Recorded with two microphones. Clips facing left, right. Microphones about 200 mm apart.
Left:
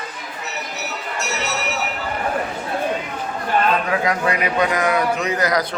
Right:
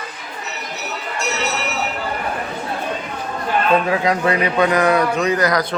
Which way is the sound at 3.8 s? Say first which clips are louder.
Right 3 dB; 30° right (ahead or behind).